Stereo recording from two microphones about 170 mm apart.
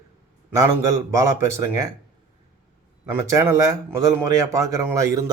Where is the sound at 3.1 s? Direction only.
20° right (ahead or behind).